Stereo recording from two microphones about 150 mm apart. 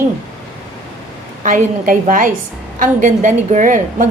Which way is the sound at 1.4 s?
60° right (ahead or behind).